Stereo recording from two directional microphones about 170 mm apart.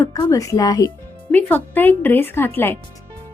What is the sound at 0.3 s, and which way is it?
Speech, 20° left (ahead or behind).